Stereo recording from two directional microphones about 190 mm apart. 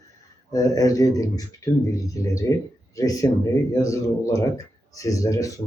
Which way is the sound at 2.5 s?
15° left (ahead or behind).